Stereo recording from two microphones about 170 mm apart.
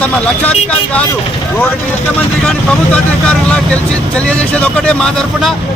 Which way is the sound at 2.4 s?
5° left (ahead or behind).